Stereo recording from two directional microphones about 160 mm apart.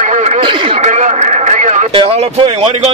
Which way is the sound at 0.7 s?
50° right (ahead or behind).